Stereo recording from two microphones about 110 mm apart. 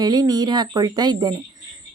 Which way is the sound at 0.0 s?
35° right (ahead or behind).